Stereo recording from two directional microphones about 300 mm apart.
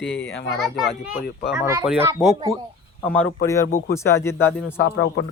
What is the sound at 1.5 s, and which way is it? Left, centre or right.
Speech, centre.